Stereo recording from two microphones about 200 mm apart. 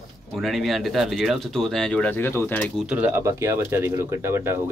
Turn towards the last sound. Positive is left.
turn(degrees=-10)  # may be behind; listen again after turning